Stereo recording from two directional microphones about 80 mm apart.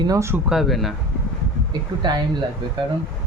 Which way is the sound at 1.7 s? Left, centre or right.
Right.